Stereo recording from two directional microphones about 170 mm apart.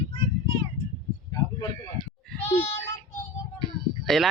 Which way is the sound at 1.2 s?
20° left (ahead or behind).